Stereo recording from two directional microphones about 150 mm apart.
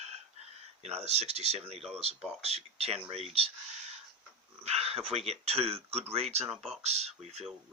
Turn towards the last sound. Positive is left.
turn(degrees=-45)  # may be behind; listen again after turning